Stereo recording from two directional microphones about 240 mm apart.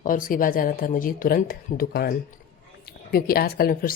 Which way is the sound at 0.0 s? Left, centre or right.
Left.